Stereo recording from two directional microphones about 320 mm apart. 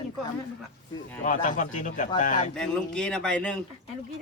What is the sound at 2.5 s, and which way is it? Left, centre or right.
Speech, centre.